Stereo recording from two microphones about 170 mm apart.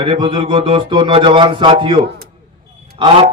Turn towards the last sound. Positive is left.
turn(degrees=-35)  # may be behind; listen again after turning